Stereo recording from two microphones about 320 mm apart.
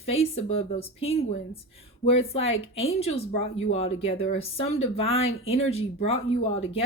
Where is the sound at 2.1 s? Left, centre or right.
Centre.